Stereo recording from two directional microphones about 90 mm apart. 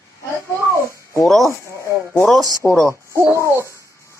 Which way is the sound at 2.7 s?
5° left (ahead or behind).